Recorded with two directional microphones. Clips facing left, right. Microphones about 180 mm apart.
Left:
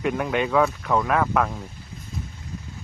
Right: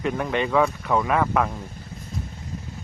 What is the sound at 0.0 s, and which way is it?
Speech, 5° left (ahead or behind).